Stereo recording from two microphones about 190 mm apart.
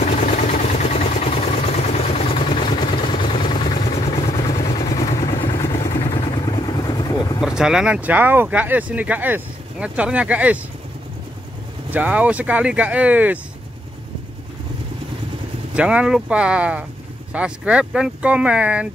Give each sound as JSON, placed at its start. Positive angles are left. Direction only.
{"t": 0.0, "sound": "vehicle", "side_deg": 40}
{"t": 5.5, "sound": "vehicle", "side_deg": 30}
{"t": 7.4, "sound": "speech", "side_deg": -5}
{"t": 11.9, "sound": "speech", "side_deg": -10}
{"t": 15.7, "sound": "speech", "side_deg": -5}